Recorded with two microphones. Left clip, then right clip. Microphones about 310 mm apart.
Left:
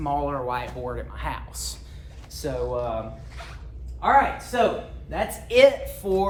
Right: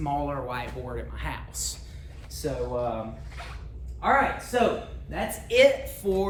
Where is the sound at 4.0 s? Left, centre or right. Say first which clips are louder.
Left 4 dB; centre.